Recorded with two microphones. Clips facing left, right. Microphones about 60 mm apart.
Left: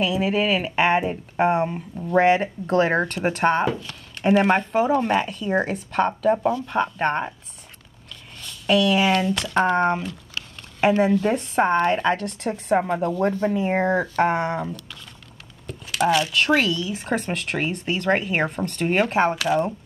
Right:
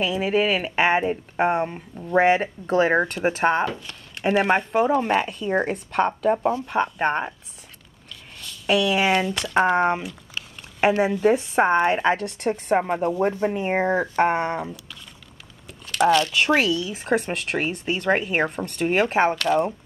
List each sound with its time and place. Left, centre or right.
0.0 s speech: centre
8.4 s speech: centre
12.8 s speech: centre
13.7 s speech: centre
15.6 s a sound: centre
16.3 s speech: centre
19.3 s speech: centre